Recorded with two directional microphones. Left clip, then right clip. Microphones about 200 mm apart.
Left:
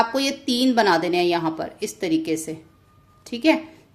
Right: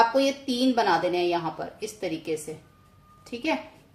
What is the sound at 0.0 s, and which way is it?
A woman's voice, 40° left (ahead or behind).